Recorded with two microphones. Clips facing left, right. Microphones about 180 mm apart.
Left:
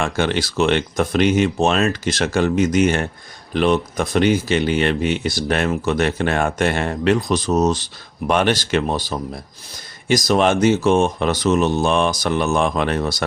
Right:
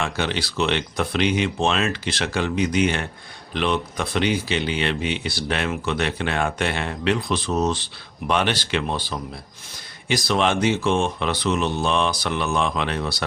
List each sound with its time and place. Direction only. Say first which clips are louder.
0.0 s speech: left 5 dB; 50° left (ahead or behind)